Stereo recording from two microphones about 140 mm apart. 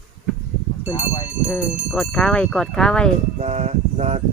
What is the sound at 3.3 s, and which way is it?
Speech, 50° right (ahead or behind).